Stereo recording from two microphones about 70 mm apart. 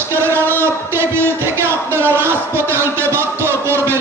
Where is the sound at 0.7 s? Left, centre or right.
Right.